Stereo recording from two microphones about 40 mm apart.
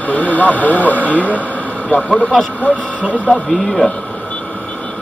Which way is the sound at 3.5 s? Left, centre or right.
Centre.